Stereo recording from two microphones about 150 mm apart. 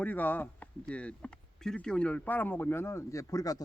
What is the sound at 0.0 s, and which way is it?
Speech, 10° left (ahead or behind).